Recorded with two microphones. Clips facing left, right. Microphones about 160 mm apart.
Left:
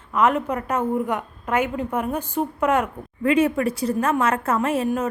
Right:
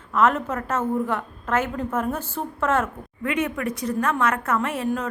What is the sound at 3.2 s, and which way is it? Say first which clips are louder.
A woman's voice: left 6 dB; 30° left (ahead or behind).